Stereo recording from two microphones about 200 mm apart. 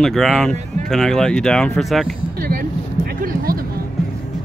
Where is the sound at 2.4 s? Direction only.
45° right (ahead or behind).